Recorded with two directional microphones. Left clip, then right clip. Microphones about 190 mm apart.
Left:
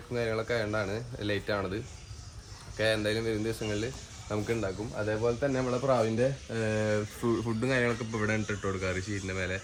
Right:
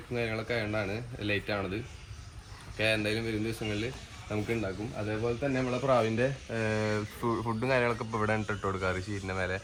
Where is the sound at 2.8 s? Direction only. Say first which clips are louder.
Left 1 dB; 15° left (ahead or behind).